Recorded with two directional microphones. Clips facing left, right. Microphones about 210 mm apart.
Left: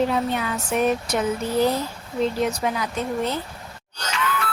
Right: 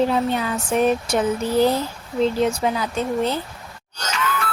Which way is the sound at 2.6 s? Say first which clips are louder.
Right 3 dB; 30° right (ahead or behind).